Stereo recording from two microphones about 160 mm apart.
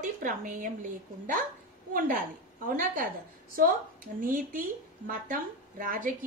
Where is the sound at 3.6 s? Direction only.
60° right (ahead or behind).